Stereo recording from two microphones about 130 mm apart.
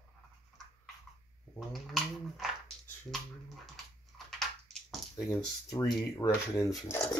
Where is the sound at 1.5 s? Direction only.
Centre (ahead or behind).